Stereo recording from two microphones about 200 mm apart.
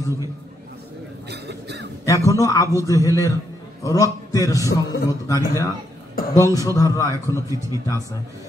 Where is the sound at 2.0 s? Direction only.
15° left (ahead or behind).